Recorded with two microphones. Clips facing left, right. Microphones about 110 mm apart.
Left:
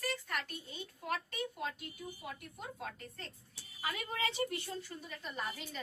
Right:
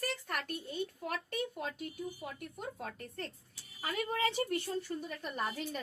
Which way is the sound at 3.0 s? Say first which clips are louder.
Right 6 dB; 55° right (ahead or behind).